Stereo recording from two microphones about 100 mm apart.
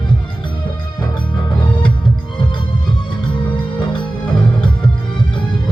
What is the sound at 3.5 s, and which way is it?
Music, 55° left (ahead or behind).